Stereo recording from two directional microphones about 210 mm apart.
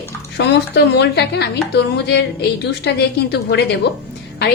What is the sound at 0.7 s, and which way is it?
A woman's voice, 55° left (ahead or behind).